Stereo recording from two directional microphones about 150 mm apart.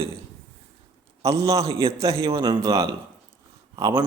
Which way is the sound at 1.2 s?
20° right (ahead or behind).